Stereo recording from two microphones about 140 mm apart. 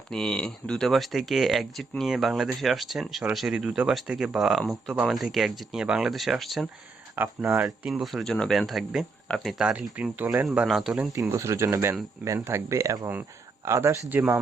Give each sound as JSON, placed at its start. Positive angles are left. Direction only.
{"t": 0.1, "sound": "speech", "side_deg": 5}
{"t": 7.2, "sound": "speech", "side_deg": -15}
{"t": 7.9, "sound": "speech", "side_deg": 0}
{"t": 11.1, "sound": "speech", "side_deg": -20}